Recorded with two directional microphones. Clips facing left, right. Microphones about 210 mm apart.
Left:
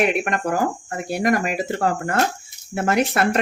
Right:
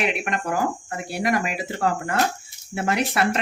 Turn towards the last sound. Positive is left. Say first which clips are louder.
# left 3 dB
turn(degrees=50)  # may be behind; listen again after turning